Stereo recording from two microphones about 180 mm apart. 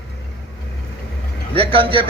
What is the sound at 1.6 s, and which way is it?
Speech, 30° right (ahead or behind).